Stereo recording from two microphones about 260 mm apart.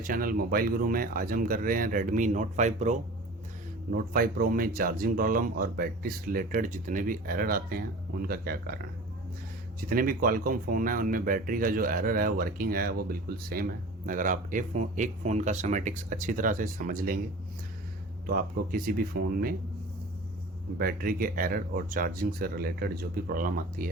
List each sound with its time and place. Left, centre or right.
0.0 s speech: right
9.9 s speech: right
18.3 s speech: right
20.7 s speech: right